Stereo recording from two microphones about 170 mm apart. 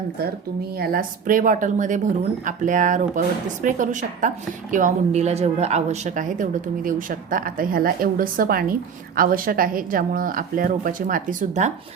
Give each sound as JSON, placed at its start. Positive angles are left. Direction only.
{"t": 0.8, "sound": "a woman's voice", "side_deg": -55}